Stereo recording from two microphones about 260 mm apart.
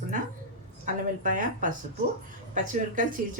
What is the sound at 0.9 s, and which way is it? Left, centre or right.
Speech, right.